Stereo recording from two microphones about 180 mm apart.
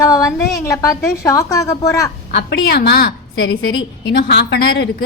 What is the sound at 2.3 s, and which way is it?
A woman's voice, 65° left (ahead or behind).